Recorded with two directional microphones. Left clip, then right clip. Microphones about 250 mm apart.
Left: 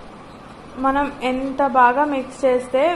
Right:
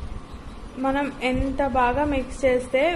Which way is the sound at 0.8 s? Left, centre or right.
Centre.